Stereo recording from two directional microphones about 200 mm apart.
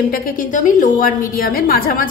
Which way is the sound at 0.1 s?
45° left (ahead or behind).